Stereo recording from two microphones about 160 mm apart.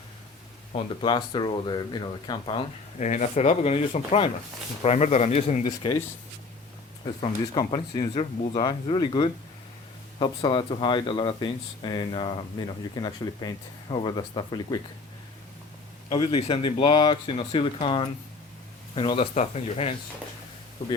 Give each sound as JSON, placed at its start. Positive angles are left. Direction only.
{"t": 1.0, "sound": "speech", "side_deg": 30}
{"t": 3.0, "sound": "speech", "side_deg": 50}
{"t": 5.6, "sound": "speech", "side_deg": 30}
{"t": 7.0, "sound": "speech", "side_deg": 25}
{"t": 16.1, "sound": "speech", "side_deg": 35}